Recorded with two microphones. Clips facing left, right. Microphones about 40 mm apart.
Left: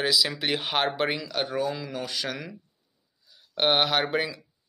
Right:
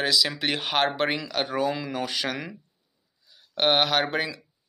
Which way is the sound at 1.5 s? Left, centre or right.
Right.